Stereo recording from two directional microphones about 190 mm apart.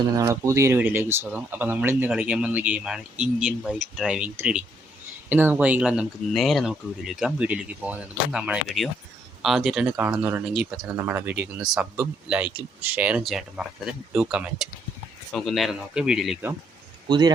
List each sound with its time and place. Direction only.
0.2 s speech: 15° right (ahead or behind)
17.1 s speech: 20° right (ahead or behind)